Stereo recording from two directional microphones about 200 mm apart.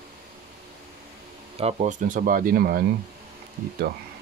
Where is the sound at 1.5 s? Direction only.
35° right (ahead or behind); by 2.8 s 50° right (ahead or behind).